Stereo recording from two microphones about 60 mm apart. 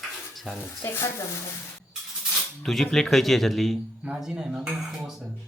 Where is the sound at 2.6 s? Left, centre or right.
Centre.